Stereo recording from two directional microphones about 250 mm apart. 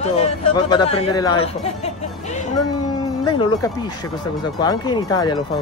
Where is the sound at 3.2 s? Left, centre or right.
Centre.